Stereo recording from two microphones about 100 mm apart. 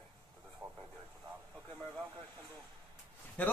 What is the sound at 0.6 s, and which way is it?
Speech, centre (ahead or behind).